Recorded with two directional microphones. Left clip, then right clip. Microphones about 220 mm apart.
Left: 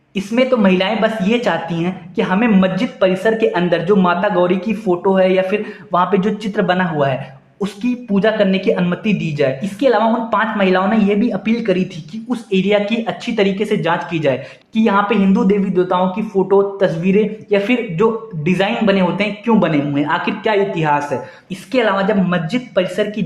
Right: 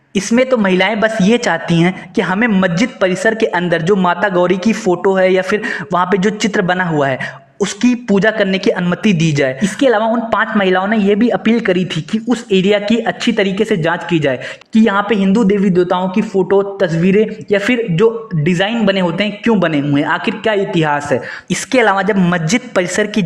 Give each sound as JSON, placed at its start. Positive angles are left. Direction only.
{"t": 0.1, "sound": "speech", "side_deg": -35}